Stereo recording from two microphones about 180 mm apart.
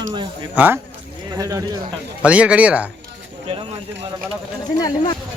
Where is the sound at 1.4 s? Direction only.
20° right (ahead or behind).